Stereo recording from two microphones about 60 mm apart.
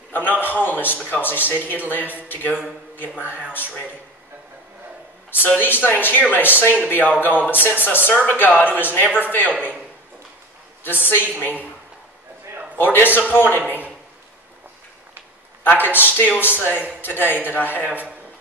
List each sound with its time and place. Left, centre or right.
0.1 s speech: left
5.4 s speech: left
10.8 s a woman's voice: left
11.1 s speech: right
12.7 s a man's voice: left
15.6 s speech: left